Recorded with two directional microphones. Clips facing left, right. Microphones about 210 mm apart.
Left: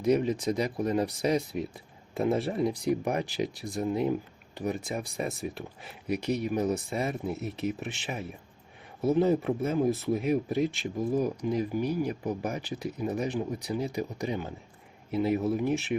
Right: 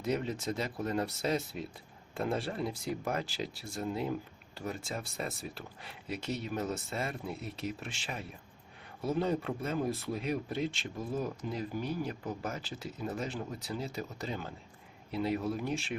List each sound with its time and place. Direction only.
0.0 s speech: 15° left (ahead or behind)